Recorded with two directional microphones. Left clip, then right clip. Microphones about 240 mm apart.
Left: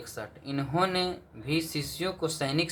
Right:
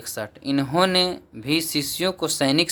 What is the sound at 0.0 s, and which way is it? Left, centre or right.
Speech, right.